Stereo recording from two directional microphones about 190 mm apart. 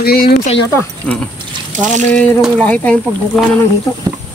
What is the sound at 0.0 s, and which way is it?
Speech, 55° left (ahead or behind).